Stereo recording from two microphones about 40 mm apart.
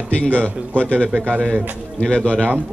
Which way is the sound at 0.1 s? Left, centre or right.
Left.